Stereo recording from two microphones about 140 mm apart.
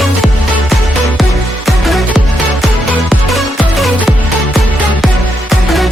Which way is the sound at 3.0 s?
Centre (ahead or behind).